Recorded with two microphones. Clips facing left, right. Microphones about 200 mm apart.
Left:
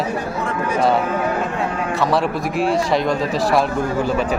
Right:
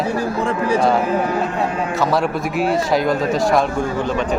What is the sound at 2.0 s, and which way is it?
Speech, centre (ahead or behind).